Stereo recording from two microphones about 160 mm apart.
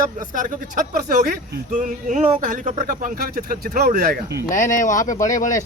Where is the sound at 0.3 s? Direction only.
60° right (ahead or behind); by 4.4 s 75° right (ahead or behind).